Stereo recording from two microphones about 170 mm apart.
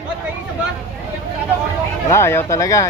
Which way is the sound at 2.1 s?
15° left (ahead or behind).